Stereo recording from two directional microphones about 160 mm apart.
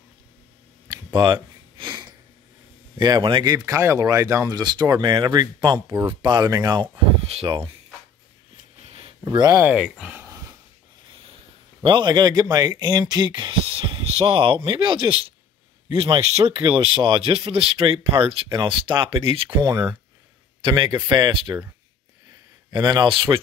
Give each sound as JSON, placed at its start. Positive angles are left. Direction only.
{"t": 0.8, "sound": "a sound", "side_deg": -25}
{"t": 3.0, "sound": "speech", "side_deg": -25}
{"t": 7.2, "sound": "speech", "side_deg": -35}
{"t": 8.8, "sound": "a sound", "side_deg": -35}
{"t": 9.2, "sound": "speech", "side_deg": -25}
{"t": 11.1, "sound": "speech", "side_deg": -35}
{"t": 22.7, "sound": "speech", "side_deg": -25}